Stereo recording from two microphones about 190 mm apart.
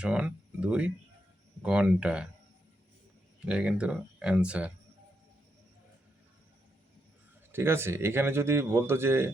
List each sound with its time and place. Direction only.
0.0 s speech: 5° right (ahead or behind)
3.4 s speech: 5° right (ahead or behind)
7.5 s speech: 10° right (ahead or behind)